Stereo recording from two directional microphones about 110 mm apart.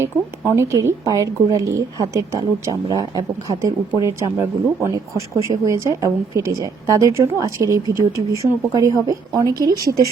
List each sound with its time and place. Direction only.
0.0 s a woman's voice: 25° right (ahead or behind)